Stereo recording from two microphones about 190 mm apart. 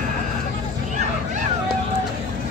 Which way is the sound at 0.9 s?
40° right (ahead or behind).